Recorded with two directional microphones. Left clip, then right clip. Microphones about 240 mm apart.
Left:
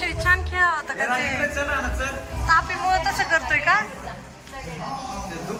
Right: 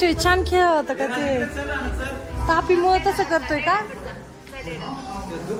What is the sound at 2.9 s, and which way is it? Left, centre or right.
Speech, centre.